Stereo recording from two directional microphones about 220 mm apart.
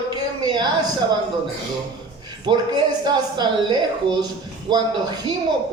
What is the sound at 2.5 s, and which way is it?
Speech, 20° right (ahead or behind).